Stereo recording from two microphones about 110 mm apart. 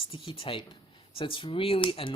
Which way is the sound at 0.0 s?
55° left (ahead or behind).